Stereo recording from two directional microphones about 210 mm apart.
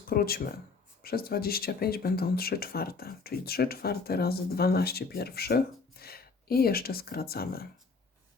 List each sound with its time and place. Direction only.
0.1 s speech: 45° left (ahead or behind)